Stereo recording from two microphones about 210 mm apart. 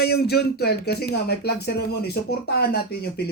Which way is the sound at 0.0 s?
50° left (ahead or behind).